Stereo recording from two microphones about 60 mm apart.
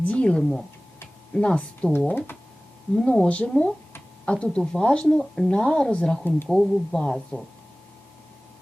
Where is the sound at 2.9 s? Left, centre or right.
Centre.